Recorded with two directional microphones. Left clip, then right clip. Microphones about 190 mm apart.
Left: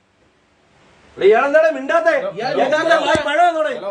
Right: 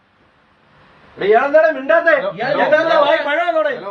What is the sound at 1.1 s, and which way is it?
Speech, 20° left (ahead or behind).